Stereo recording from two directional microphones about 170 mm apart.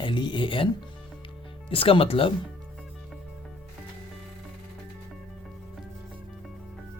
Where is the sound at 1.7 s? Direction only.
35° left (ahead or behind).